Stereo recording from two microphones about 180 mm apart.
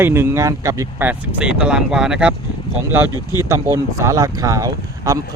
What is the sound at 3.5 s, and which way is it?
Speech, 15° right (ahead or behind).